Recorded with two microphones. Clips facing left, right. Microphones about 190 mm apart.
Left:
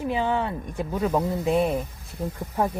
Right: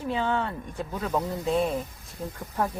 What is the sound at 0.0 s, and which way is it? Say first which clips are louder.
Speech: left 3 dB; 15° left (ahead or behind).